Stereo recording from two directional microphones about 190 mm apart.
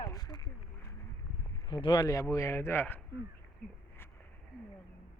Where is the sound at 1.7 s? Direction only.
20° left (ahead or behind).